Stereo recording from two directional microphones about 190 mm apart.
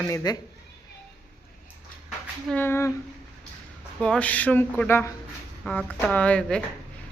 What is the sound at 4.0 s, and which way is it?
Speech, 5° left (ahead or behind).